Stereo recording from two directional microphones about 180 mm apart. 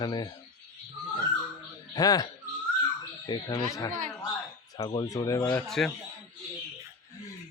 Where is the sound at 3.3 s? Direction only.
20° left (ahead or behind).